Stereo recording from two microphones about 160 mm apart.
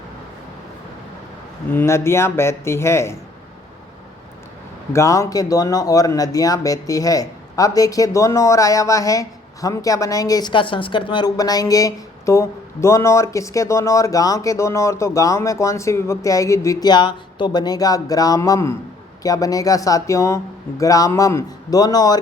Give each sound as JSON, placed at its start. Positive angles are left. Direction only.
{"t": 1.7, "sound": "speech", "side_deg": 15}
{"t": 4.9, "sound": "speech", "side_deg": 20}